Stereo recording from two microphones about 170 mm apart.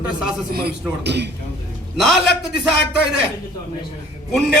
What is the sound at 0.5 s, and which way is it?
Speech, 75° right (ahead or behind).